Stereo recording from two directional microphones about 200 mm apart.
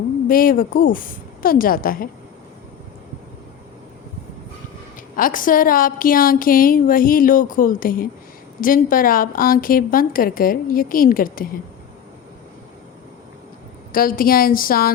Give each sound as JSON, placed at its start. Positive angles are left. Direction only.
{"t": 0.3, "sound": "a woman's voice", "side_deg": 45}
{"t": 5.1, "sound": "a woman's voice", "side_deg": 45}
{"t": 13.9, "sound": "a woman's voice", "side_deg": 45}